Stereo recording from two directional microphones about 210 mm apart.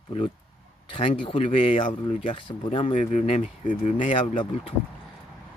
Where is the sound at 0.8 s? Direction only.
25° left (ahead or behind).